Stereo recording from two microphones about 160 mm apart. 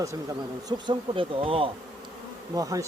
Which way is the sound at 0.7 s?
30° right (ahead or behind).